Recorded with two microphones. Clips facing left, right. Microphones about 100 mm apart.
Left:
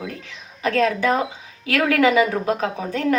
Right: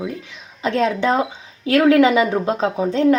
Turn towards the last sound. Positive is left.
turn(degrees=-25)  # may be behind; listen again after turning